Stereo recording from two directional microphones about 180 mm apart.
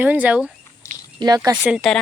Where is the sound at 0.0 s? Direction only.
10° right (ahead or behind).